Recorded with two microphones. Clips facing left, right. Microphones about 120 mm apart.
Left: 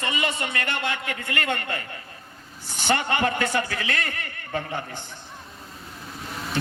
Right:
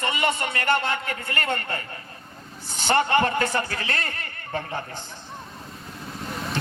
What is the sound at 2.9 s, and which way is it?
A man's voice, 40° right (ahead or behind).